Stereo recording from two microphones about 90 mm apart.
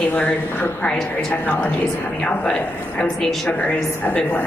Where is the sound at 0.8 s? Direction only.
10° left (ahead or behind).